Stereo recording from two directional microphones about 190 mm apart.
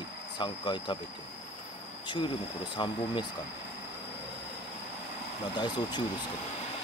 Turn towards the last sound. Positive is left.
turn(degrees=25)  # may be behind; listen again after turning